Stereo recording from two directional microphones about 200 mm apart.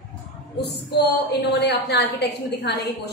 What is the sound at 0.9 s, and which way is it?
A woman's voice, 60° left (ahead or behind).